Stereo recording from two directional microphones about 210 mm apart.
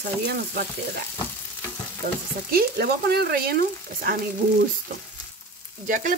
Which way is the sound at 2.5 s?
50° right (ahead or behind).